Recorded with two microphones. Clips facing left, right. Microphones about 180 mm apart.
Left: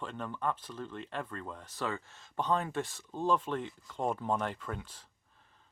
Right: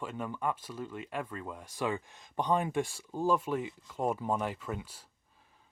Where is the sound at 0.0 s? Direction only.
10° right (ahead or behind).